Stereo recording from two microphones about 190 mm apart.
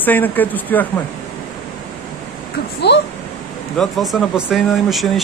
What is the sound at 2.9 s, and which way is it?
Speech, 60° left (ahead or behind).